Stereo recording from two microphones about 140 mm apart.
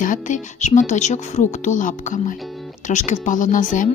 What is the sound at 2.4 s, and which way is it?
Speech, centre (ahead or behind).